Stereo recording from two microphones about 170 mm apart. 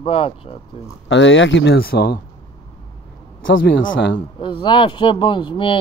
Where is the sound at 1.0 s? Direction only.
90° left; by 2.2 s 65° left (ahead or behind).